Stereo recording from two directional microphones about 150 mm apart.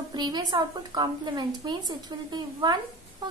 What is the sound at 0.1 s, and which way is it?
A woman's voice, 30° right (ahead or behind).